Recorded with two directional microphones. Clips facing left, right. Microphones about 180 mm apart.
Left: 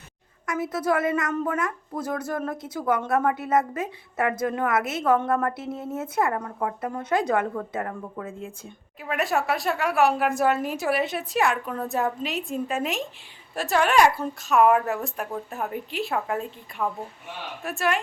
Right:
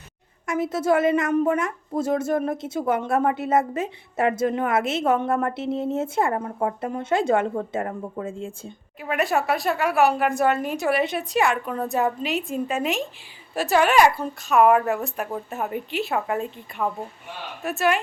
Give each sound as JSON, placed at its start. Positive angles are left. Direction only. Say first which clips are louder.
{"t": 0.4, "sound": "a woman's voice", "louder": "right 3 dB", "side_deg": -25}
{"t": 9.0, "sound": "a woman's voice", "louder": "right 2 dB", "side_deg": 0}